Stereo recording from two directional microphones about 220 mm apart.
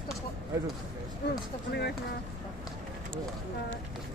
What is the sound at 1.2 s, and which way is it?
Speech, 45° left (ahead or behind).